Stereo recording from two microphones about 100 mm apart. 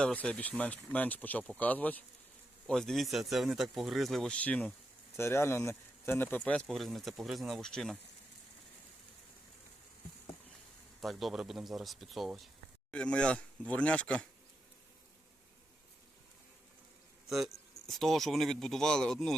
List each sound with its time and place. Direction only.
0.0 s speech: 10° left (ahead or behind)
2.6 s speech: 5° left (ahead or behind)
5.1 s speech: 25° left (ahead or behind)
6.7 s speech: centre (ahead or behind)
11.0 s speech: centre (ahead or behind)
12.9 s speech: 10° left (ahead or behind)
17.2 s speech: centre (ahead or behind)